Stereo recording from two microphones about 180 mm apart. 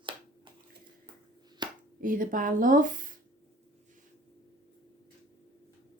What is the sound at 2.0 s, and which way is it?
Speech, 50° right (ahead or behind).